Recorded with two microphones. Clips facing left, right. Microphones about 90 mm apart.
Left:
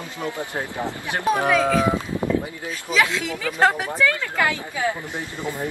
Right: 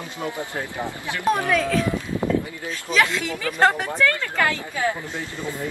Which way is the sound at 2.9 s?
5° left (ahead or behind).